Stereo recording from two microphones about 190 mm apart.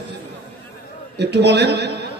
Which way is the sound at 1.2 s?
65° right (ahead or behind).